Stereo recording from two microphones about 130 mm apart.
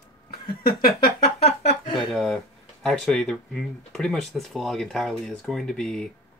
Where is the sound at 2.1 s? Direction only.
Centre (ahead or behind).